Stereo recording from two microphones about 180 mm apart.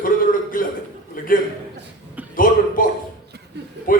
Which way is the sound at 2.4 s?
50° left (ahead or behind).